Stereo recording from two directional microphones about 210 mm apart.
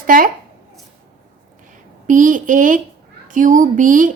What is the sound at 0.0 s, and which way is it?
Speech, 40° right (ahead or behind).